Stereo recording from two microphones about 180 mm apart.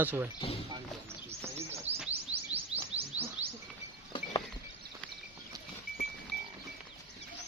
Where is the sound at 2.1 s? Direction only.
35° right (ahead or behind).